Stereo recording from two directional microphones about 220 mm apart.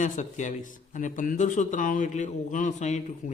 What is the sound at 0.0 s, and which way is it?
A man's voice, 35° left (ahead or behind).